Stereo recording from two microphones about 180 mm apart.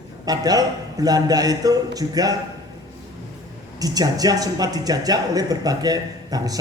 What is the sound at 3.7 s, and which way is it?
Speech, 20° right (ahead or behind).